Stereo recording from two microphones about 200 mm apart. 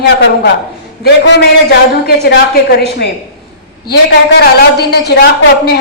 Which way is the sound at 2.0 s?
55° left (ahead or behind).